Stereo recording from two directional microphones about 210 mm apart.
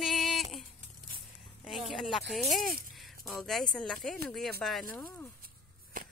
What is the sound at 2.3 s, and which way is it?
Speech, centre (ahead or behind).